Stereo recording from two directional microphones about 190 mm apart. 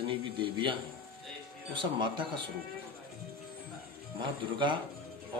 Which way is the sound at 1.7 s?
25° right (ahead or behind).